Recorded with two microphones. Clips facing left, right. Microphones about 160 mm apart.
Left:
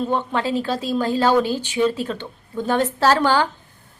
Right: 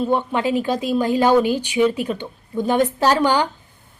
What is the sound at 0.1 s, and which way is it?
Speech, 15° right (ahead or behind).